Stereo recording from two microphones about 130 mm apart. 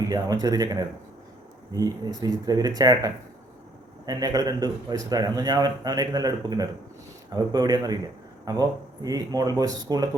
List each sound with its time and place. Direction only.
0.1 s a man's voice: 30° right (ahead or behind)